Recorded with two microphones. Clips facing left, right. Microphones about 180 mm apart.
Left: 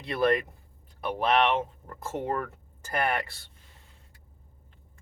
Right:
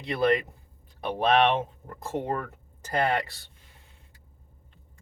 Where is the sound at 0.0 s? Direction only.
20° right (ahead or behind).